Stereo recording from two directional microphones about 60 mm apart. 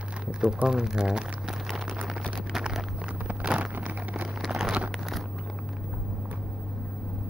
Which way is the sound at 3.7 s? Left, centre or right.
Right.